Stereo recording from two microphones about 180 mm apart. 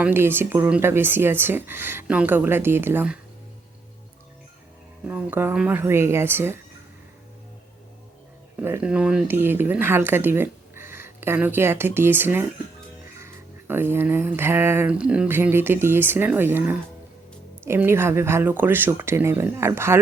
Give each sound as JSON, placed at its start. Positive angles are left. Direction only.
{"t": 0.0, "sound": "speech", "side_deg": -10}
{"t": 5.0, "sound": "speech", "side_deg": -10}
{"t": 8.6, "sound": "speech", "side_deg": -10}